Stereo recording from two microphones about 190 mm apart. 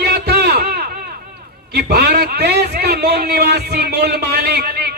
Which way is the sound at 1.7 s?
60° right (ahead or behind).